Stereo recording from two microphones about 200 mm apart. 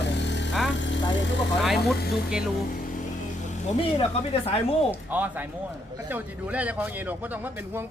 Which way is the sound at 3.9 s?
30° left (ahead or behind).